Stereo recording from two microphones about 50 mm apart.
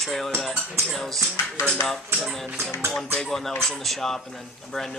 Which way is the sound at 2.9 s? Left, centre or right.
Centre.